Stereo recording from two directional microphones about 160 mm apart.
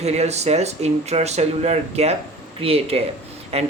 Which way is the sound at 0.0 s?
40° right (ahead or behind).